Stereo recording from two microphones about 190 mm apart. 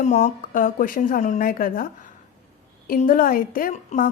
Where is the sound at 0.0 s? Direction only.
40° left (ahead or behind).